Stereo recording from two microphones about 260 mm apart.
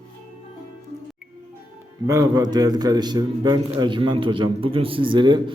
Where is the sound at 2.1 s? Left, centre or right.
Centre.